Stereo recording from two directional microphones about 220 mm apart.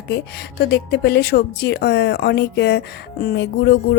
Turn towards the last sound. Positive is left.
turn(degrees=50)  # may be behind; listen again after turning